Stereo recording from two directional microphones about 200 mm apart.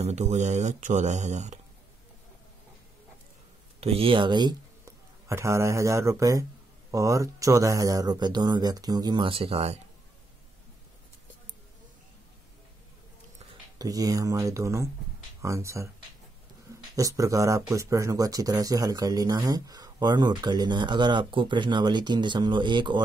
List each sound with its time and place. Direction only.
0.0 s speech: 35° right (ahead or behind)
3.8 s speech: 30° right (ahead or behind)
13.7 s speech: 20° right (ahead or behind)
16.9 s speech: 15° right (ahead or behind)